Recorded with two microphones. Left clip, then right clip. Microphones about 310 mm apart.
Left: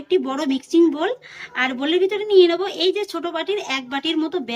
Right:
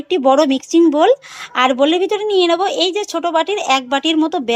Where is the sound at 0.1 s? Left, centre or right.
Centre.